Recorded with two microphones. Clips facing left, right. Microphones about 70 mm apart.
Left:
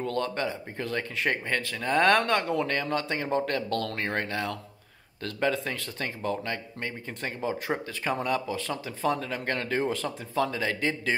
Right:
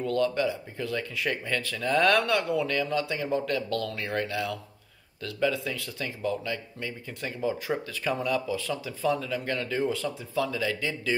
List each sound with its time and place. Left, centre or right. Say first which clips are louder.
0.0 s speech: right 3 dB; left
7.7 s speech: even; left
10.0 s speech: left 1 dB; left